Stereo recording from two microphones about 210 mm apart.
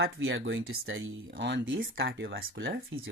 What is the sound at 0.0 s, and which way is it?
Speech, 60° right (ahead or behind).